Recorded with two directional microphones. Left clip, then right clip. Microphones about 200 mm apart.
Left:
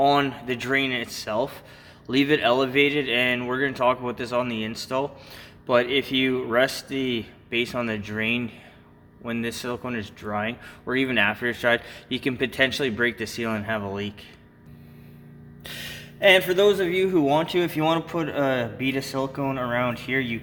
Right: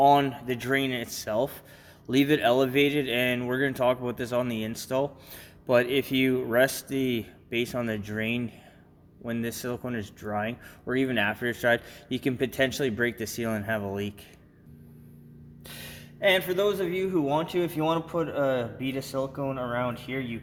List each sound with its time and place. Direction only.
0.0 s speech: 10° right (ahead or behind)
15.6 s speech: centre (ahead or behind)